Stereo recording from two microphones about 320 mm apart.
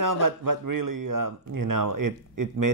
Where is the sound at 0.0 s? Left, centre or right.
Right.